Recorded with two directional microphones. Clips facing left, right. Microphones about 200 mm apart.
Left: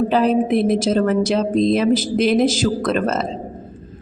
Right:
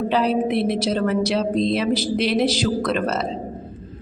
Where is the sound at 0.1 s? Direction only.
50° left (ahead or behind).